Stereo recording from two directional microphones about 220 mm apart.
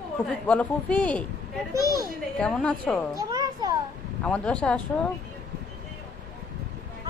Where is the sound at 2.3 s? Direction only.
5° left (ahead or behind).